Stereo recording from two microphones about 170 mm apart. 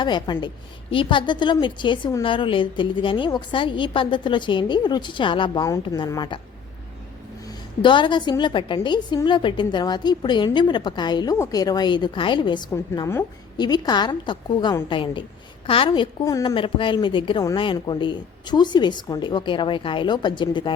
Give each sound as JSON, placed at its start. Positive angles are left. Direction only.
{"t": 0.0, "sound": "a woman's voice", "side_deg": 25}
{"t": 7.4, "sound": "a woman's voice", "side_deg": 30}
{"t": 12.7, "sound": "a woman's voice", "side_deg": 15}
{"t": 16.2, "sound": "a woman's voice", "side_deg": 20}